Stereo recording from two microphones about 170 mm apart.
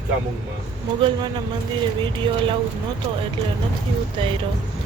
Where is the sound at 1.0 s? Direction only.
30° right (ahead or behind).